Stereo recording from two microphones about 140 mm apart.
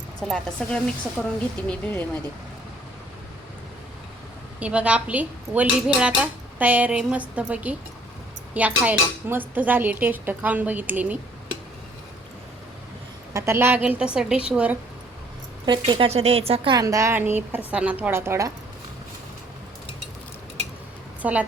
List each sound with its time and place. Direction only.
0.2 s a woman's voice: 5° left (ahead or behind)
4.6 s speech: 10° right (ahead or behind)
13.3 s speech: 20° right (ahead or behind)
15.6 s speech: 35° right (ahead or behind)
16.0 s speech: 45° right (ahead or behind)
16.7 s speech: 25° right (ahead or behind)
21.2 s a woman's voice: 10° right (ahead or behind)